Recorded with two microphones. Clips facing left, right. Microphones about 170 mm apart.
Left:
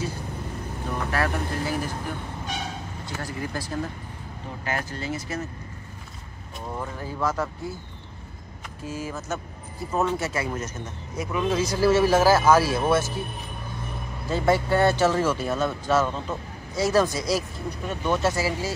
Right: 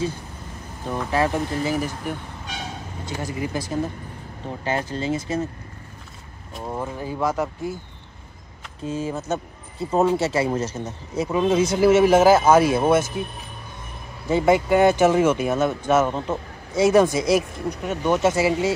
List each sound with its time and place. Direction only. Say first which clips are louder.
1.1 s speech: right 6 dB; 20° right (ahead or behind)
3.1 s speech: right 5 dB; 20° right (ahead or behind)
6.7 s speech: right 4 dB; 20° right (ahead or behind)
8.8 s speech: right 6 dB; 25° right (ahead or behind)
14.3 s speech: right 4 dB; 15° right (ahead or behind)